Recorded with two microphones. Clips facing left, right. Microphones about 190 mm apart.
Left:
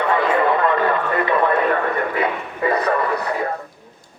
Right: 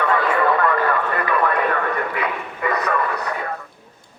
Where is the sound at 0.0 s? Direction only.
20° left (ahead or behind).